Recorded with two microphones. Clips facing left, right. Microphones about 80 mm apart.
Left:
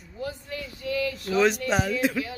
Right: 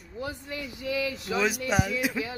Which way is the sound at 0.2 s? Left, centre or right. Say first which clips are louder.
Left 1 dB; centre.